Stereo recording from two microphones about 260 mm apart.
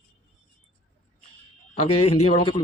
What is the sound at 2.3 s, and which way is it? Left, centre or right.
Speech, centre.